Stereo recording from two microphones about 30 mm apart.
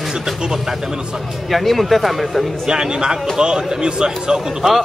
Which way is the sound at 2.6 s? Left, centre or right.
Right.